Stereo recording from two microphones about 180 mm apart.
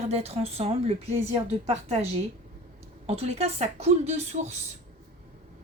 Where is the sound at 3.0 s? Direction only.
35° right (ahead or behind).